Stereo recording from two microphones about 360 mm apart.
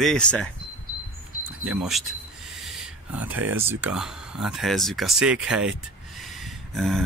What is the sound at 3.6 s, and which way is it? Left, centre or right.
Speech, centre.